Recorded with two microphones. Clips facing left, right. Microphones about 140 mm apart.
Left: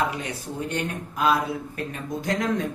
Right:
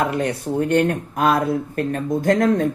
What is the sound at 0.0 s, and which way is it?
Speech, 55° right (ahead or behind).